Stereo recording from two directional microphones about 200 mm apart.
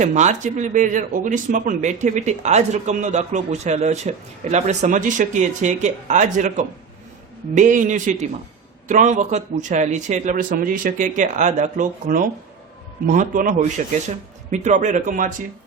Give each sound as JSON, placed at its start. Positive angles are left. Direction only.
{"t": 0.0, "sound": "speech", "side_deg": -35}